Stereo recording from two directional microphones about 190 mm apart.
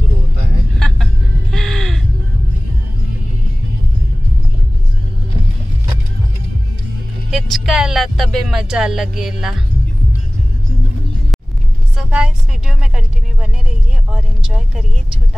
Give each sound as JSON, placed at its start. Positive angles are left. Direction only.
{"t": 0.7, "sound": "vehicle", "side_deg": 5}
{"t": 1.5, "sound": "a sound", "side_deg": 0}
{"t": 7.2, "sound": "speech", "side_deg": 0}
{"t": 12.0, "sound": "speech", "side_deg": -5}